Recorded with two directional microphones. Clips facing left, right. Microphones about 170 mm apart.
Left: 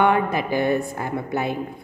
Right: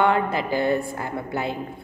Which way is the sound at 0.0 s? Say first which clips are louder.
Left 1 dB; 20° left (ahead or behind).